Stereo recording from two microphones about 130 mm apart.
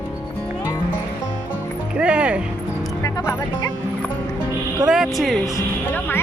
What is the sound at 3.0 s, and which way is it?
Music, 25° left (ahead or behind).